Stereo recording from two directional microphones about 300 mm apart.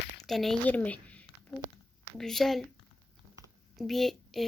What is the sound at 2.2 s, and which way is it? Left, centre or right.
Speech, centre.